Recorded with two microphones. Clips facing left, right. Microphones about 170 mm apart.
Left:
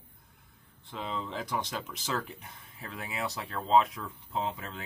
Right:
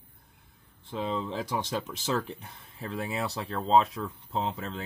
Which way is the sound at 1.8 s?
30° right (ahead or behind).